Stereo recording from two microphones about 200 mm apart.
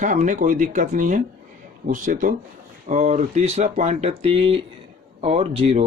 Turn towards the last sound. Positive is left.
turn(degrees=-30)  # may be behind; listen again after turning